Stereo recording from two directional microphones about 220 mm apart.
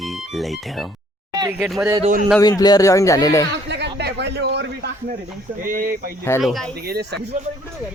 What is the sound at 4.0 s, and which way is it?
A man's voice, 50° right (ahead or behind).